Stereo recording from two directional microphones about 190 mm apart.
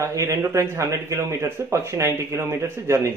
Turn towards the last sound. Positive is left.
turn(degrees=-15)  # may be behind; listen again after turning